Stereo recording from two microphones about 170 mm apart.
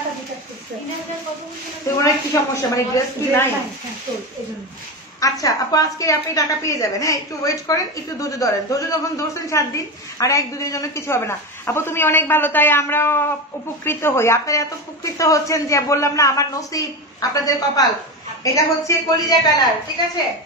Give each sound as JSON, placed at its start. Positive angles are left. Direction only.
{"t": 2.0, "sound": "speech", "side_deg": 20}
{"t": 5.2, "sound": "a woman's voice", "side_deg": 20}